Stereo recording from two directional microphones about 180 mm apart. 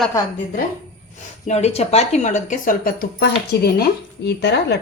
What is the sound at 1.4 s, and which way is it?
Speech, 35° left (ahead or behind).